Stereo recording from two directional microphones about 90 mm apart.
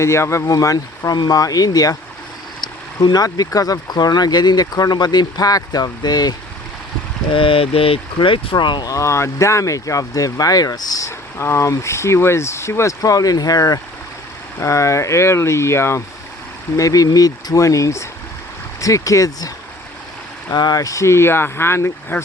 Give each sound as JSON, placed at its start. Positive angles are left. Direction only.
{"t": 0.0, "sound": "speech", "side_deg": 30}
{"t": 7.3, "sound": "speech", "side_deg": 90}
{"t": 8.9, "sound": "speech", "side_deg": 35}
{"t": 11.3, "sound": "speech", "side_deg": 30}
{"t": 20.5, "sound": "speech", "side_deg": 50}